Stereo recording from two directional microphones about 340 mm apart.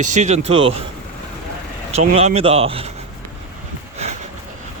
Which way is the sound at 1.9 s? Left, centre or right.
Centre.